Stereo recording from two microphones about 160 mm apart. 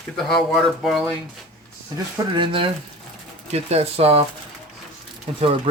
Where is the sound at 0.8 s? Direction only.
Centre (ahead or behind).